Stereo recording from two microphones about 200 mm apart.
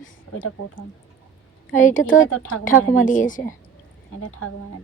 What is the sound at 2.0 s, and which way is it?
Speech, 80° left.